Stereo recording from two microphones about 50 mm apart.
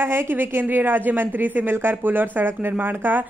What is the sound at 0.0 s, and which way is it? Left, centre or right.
A woman's voice, right.